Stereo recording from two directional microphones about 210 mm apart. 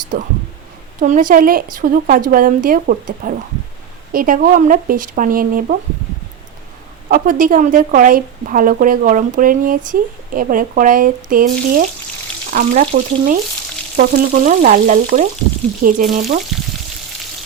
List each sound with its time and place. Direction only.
0.1 s a woman's voice: 40° right (ahead or behind)
7.1 s a woman's voice: 40° right (ahead or behind)
16.5 s frying: centre (ahead or behind)